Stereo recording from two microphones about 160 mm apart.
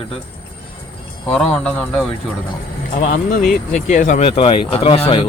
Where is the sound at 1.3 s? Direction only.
10° left (ahead or behind).